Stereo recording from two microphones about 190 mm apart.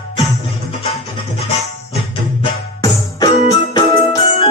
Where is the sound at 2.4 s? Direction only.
20° left (ahead or behind).